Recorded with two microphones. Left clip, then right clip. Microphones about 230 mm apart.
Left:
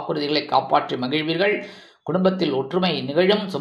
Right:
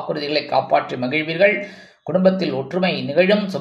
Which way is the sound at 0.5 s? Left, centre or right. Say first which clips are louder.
Right 1 dB; centre.